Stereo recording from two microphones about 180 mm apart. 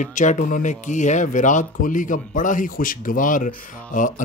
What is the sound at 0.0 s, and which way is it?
Speech, 45° left (ahead or behind).